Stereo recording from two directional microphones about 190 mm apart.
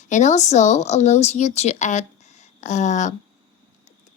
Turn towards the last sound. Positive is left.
turn(degrees=40)  # may be behind; listen again after turning